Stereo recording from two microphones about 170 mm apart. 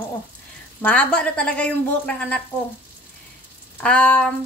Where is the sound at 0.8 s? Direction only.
5° left (ahead or behind).